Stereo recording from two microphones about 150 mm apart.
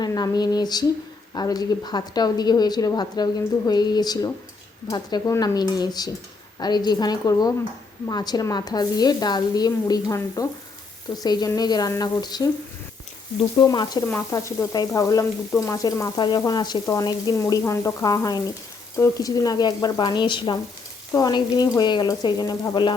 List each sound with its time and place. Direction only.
0.0 s speech: 25° left (ahead or behind)
13.6 s speech: 30° left (ahead or behind)